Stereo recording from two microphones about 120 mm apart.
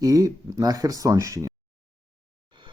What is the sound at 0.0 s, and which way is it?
Speech, 30° right (ahead or behind).